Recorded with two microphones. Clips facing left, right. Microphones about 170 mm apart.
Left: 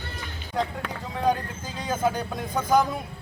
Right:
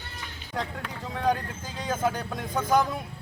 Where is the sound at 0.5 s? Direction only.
Centre (ahead or behind).